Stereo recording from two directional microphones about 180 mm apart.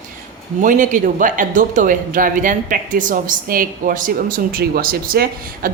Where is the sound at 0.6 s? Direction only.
45° right (ahead or behind).